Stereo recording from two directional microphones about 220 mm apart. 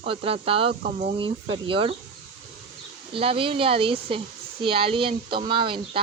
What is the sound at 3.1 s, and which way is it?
Speech, 25° right (ahead or behind).